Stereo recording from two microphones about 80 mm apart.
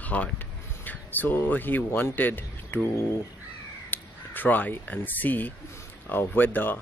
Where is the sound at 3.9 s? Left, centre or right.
Left.